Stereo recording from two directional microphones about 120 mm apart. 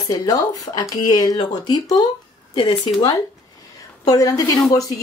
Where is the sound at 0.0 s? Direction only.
30° left (ahead or behind).